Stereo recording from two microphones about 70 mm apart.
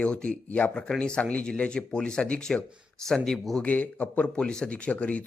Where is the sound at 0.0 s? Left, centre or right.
Centre.